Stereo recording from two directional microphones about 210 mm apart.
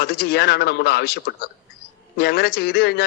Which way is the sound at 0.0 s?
50° left (ahead or behind).